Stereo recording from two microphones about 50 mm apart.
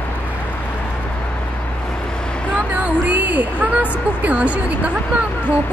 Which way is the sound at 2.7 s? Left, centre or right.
Right.